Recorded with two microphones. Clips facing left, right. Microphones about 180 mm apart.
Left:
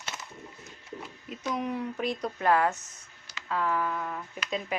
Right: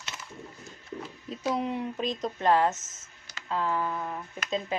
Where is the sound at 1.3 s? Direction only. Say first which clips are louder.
Right 2 dB; 30° right (ahead or behind).